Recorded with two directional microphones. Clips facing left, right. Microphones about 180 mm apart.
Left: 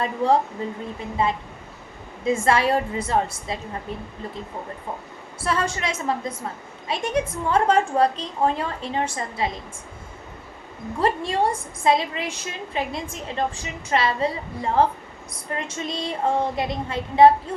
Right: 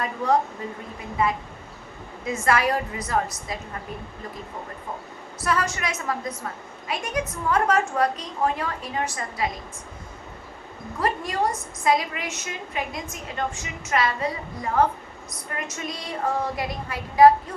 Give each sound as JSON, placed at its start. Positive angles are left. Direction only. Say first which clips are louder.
{"t": 0.0, "sound": "a woman's voice", "louder": "left 3 dB", "side_deg": 30}
{"t": 5.4, "sound": "a woman's voice", "louder": "left 1 dB", "side_deg": 30}
{"t": 11.0, "sound": "a woman's voice", "louder": "left 3 dB", "side_deg": 30}